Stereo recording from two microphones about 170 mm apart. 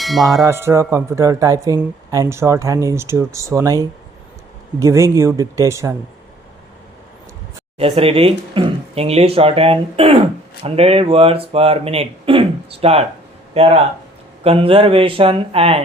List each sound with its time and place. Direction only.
0.0 s tubular bells: centre (ahead or behind)
0.4 s speech: 15° right (ahead or behind)
7.8 s speech: 35° right (ahead or behind)